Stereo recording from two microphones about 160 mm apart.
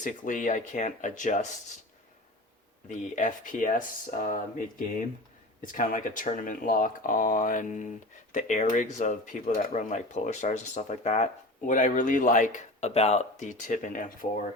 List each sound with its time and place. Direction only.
0.0 s speech: 55° left (ahead or behind)
2.9 s speech: 50° left (ahead or behind)